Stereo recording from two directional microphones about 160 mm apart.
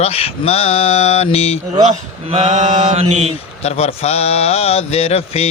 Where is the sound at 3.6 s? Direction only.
40° left (ahead or behind).